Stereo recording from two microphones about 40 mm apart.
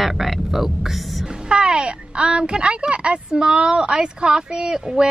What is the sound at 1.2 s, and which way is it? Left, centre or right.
Speech, centre.